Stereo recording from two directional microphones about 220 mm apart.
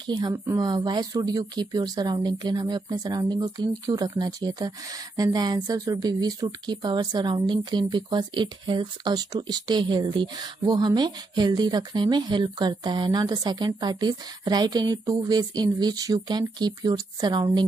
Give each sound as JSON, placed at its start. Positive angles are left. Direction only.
{"t": 0.0, "sound": "speech", "side_deg": -20}